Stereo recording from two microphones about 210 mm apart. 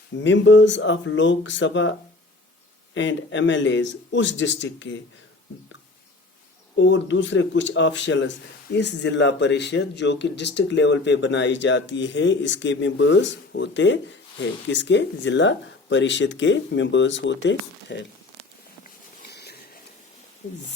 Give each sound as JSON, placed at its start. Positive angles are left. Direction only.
{"t": 0.2, "sound": "speech", "side_deg": 60}
{"t": 2.9, "sound": "speech", "side_deg": 60}
{"t": 6.7, "sound": "speech", "side_deg": 60}
{"t": 19.3, "sound": "a sound", "side_deg": 50}